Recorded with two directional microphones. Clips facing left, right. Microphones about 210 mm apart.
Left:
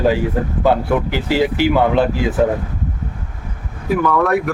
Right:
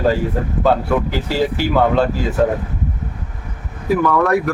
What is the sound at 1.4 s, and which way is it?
Speech, 15° left (ahead or behind).